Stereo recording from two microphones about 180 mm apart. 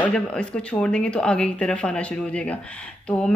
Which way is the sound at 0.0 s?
5° left (ahead or behind).